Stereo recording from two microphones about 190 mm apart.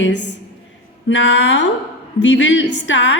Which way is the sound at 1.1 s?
75° left (ahead or behind).